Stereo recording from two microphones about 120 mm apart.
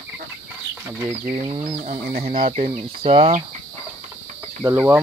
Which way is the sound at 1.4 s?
45° right (ahead or behind).